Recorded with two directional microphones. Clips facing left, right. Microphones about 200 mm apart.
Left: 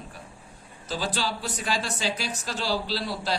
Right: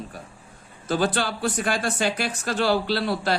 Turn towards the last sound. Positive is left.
turn(degrees=-60)  # may be behind; listen again after turning